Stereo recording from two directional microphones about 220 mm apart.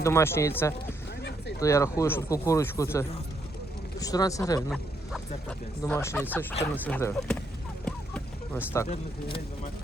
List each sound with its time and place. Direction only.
0.0 s speech: 10° left (ahead or behind)
4.7 s speech: centre (ahead or behind)
5.8 s speech: 10° left (ahead or behind)
7.9 s a sound: 5° left (ahead or behind)